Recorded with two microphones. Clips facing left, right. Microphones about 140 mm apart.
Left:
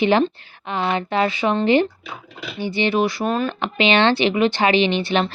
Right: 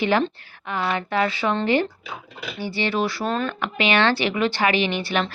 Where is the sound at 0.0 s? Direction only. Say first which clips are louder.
Left 4 dB; 20° left (ahead or behind).